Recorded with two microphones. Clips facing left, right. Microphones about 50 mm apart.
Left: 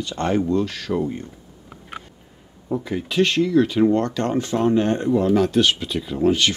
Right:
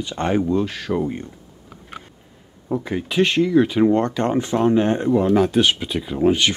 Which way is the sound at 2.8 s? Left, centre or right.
Right.